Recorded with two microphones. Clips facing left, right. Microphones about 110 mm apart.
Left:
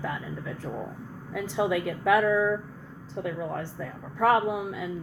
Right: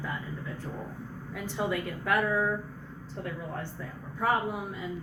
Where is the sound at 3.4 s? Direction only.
90° left.